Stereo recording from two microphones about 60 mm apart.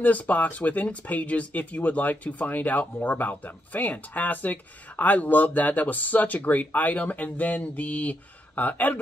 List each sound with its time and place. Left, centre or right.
0.0 s speech: left